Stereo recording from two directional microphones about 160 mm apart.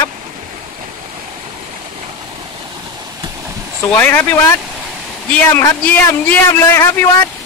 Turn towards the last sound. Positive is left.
turn(degrees=15)  # may be behind; listen again after turning